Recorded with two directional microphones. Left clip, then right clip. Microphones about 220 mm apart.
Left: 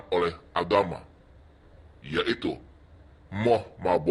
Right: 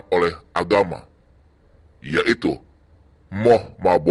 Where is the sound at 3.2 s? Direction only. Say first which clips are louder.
Right 8 dB; 35° right (ahead or behind).